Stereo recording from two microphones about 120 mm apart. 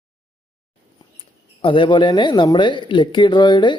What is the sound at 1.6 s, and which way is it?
Speech, 45° left (ahead or behind).